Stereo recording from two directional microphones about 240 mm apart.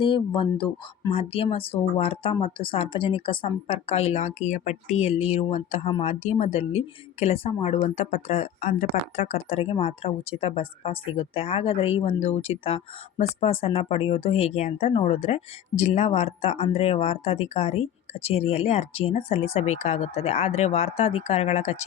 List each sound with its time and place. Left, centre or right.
0.0 s speech: centre